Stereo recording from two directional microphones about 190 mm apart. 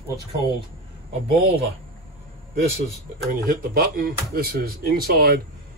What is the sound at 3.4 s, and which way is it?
Speech, 55° right (ahead or behind).